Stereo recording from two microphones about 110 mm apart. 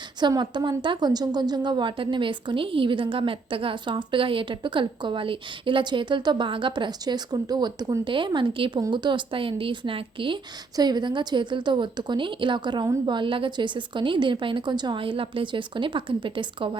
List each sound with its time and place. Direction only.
0.2 s a woman's voice: 40° right (ahead or behind)